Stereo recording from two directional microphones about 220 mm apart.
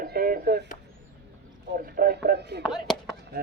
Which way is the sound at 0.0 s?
40° right (ahead or behind).